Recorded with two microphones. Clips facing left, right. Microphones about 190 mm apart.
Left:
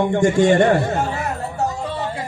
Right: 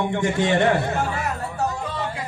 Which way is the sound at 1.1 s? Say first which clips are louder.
Left 2 dB; 25° left (ahead or behind).